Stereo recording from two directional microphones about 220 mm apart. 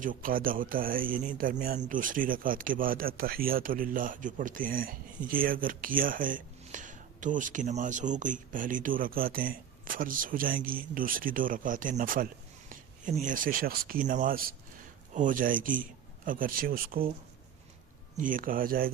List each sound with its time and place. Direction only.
0.0 s speech: 40° right (ahead or behind)
18.2 s speech: 40° right (ahead or behind)